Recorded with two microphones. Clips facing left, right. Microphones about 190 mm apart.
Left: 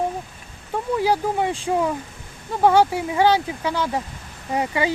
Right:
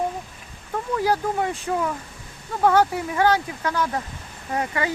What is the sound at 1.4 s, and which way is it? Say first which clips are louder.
Speech: left 3 dB; 25° left (ahead or behind).